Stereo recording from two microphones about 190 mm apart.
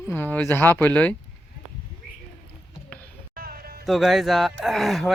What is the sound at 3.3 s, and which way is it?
Music, 50° right (ahead or behind).